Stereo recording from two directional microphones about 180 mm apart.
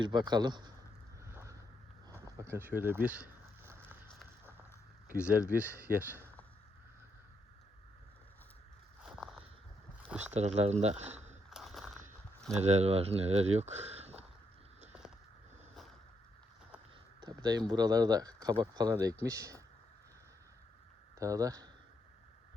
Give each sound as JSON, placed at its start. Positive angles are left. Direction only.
{"t": 0.0, "sound": "speech", "side_deg": -25}
{"t": 1.2, "sound": "vehicle", "side_deg": -15}
{"t": 2.0, "sound": "a sound", "side_deg": -15}
{"t": 5.1, "sound": "speech", "side_deg": -5}
{"t": 9.0, "sound": "a sound", "side_deg": 0}
{"t": 10.3, "sound": "speech", "side_deg": -35}
{"t": 11.5, "sound": "a sound", "side_deg": 0}
{"t": 12.6, "sound": "speech", "side_deg": -35}
{"t": 17.2, "sound": "speech", "side_deg": -20}
{"t": 21.2, "sound": "speech", "side_deg": -20}